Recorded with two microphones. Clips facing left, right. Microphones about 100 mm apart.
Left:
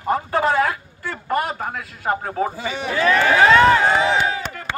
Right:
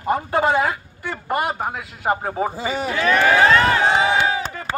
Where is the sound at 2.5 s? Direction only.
35° right (ahead or behind).